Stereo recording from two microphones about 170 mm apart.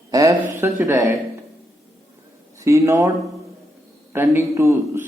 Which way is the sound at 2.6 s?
15° right (ahead or behind).